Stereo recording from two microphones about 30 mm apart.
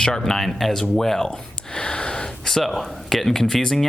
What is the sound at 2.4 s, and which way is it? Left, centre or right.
Speech, centre.